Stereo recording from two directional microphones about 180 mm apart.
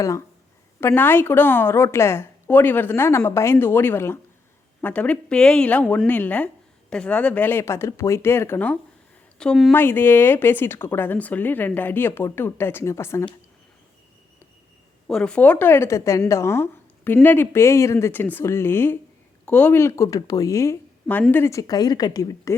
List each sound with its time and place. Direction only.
0.8 s speech: 10° left (ahead or behind)
15.0 s speech: 5° left (ahead or behind); by 22.5 s 20° left (ahead or behind)